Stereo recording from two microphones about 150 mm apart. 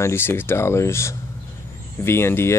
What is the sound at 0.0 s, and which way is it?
Speech, 15° left (ahead or behind).